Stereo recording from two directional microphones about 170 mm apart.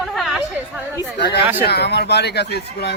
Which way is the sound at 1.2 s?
75° left (ahead or behind).